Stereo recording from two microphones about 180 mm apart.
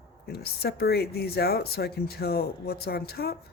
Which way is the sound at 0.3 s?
60° left (ahead or behind).